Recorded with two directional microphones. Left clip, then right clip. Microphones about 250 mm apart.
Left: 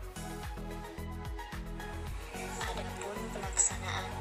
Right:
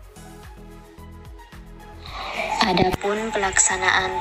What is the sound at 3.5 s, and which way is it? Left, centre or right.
Speech, right.